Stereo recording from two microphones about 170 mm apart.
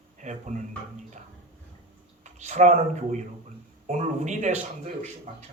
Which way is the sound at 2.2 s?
45° right (ahead or behind).